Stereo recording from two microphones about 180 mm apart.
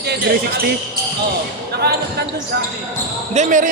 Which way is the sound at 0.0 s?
60° right (ahead or behind).